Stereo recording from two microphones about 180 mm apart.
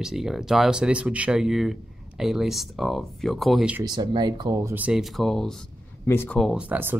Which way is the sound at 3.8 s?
25° right (ahead or behind).